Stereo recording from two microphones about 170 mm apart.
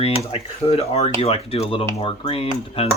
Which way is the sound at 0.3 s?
35° left (ahead or behind).